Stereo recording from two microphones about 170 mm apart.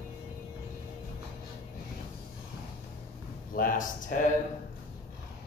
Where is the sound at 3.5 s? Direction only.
55° left (ahead or behind).